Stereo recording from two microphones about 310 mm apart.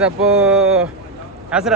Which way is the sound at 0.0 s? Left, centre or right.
Centre.